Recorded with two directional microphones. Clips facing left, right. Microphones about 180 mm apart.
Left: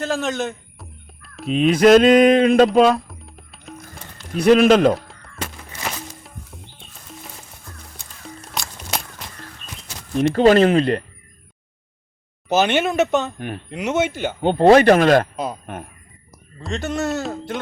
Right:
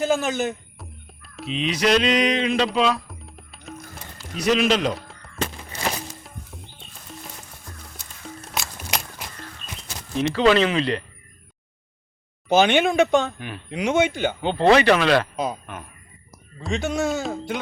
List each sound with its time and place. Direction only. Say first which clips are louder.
0.0 s chicken: right 1 dB; centre (ahead or behind)
1.5 s mantra: left 9 dB; 50° left (ahead or behind)
3.1 s music: even; centre (ahead or behind)
4.4 s mantra: left 8 dB; 55° left (ahead or behind)
4.9 s a sound: left 1 dB; centre (ahead or behind)
6.2 s music: even; centre (ahead or behind)
10.2 s mantra: left 5 dB; 50° left (ahead or behind)
12.5 s a man's voice: even; 5° left (ahead or behind)
14.4 s mantra: left 5 dB; 50° left (ahead or behind)
15.6 s speech: left 5 dB; 50° left (ahead or behind)
16.6 s a man's voice: even; centre (ahead or behind)